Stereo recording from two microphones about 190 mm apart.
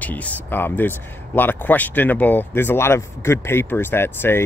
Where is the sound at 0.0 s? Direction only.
10° left (ahead or behind).